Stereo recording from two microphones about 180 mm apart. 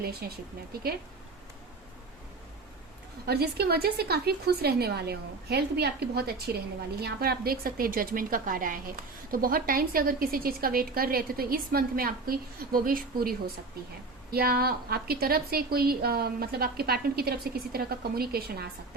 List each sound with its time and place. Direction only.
0.0 s a woman's voice: 60° right (ahead or behind)
3.2 s a woman's voice: 60° right (ahead or behind)
14.3 s a woman's voice: 55° right (ahead or behind)